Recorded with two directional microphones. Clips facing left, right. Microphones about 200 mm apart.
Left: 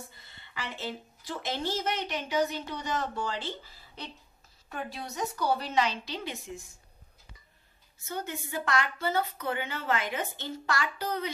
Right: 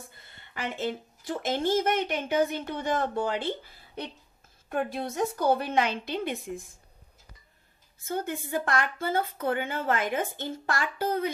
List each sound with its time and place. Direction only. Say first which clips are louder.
0.1 s a woman's voice: right 2 dB; 50° right (ahead or behind)
8.0 s speech: right 5 dB; 50° right (ahead or behind)